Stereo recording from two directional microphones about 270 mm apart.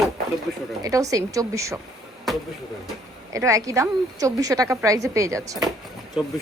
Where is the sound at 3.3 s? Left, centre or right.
Centre.